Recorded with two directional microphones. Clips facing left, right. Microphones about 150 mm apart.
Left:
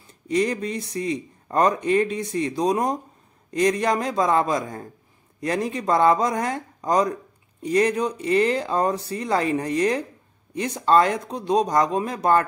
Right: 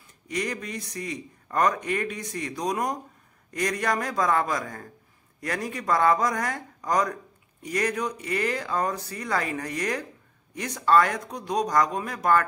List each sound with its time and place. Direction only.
0.3 s a man's voice: 30° left (ahead or behind)